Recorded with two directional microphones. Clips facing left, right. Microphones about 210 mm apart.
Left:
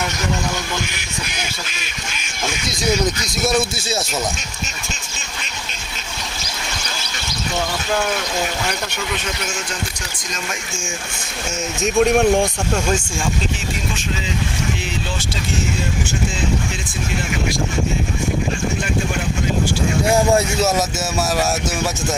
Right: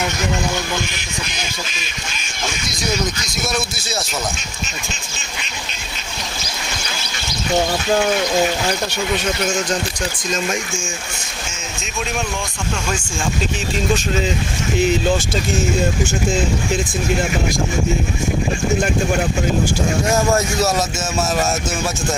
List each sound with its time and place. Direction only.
1.3 s quack: 10° left (ahead or behind)
3.4 s speech: 25° left (ahead or behind)
11.9 s a man's voice: 55° left (ahead or behind)
20.1 s quack: 10° left (ahead or behind)